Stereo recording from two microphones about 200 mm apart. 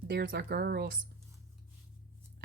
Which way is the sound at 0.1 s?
55° right (ahead or behind).